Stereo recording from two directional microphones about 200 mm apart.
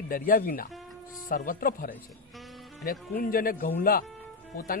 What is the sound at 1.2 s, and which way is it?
A man's voice, 45° left (ahead or behind).